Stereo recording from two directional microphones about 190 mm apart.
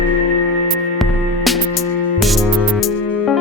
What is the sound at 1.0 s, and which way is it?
Music, centre (ahead or behind).